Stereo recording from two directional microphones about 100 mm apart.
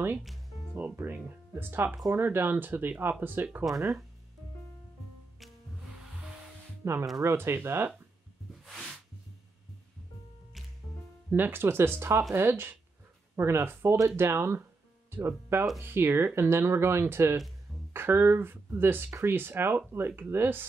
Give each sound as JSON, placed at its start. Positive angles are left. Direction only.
{"t": 0.7, "sound": "speech", "side_deg": -20}
{"t": 3.7, "sound": "speech", "side_deg": 0}
{"t": 6.8, "sound": "speech", "side_deg": -25}
{"t": 8.6, "sound": "a sound", "side_deg": 5}
{"t": 11.2, "sound": "speech", "side_deg": -20}